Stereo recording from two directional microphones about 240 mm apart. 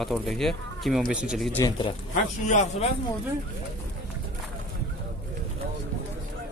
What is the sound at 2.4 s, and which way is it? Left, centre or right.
Speech, left.